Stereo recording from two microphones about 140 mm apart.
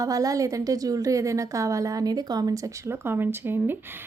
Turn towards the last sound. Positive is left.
turn(degrees=-15)  # may be behind; listen again after turning